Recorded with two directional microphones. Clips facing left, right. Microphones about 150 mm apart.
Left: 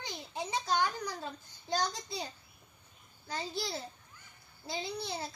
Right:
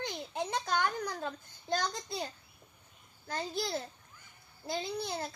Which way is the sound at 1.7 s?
55° right (ahead or behind).